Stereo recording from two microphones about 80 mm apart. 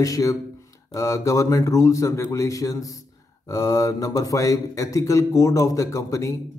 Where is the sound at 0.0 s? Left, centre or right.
Left.